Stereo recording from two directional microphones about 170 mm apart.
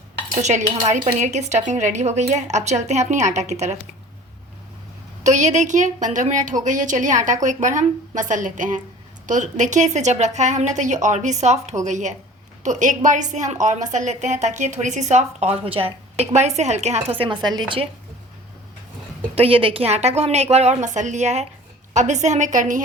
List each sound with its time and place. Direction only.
0.4 s a woman's voice: 40° right (ahead or behind)
5.2 s a woman's voice: 45° right (ahead or behind)
17.2 s speech: 25° right (ahead or behind)
19.4 s a woman's voice: 35° right (ahead or behind)